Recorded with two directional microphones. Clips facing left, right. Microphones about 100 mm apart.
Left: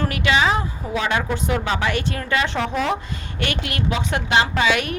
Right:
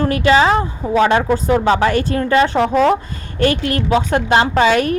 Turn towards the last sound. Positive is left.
turn(degrees=-40)  # may be behind; listen again after turning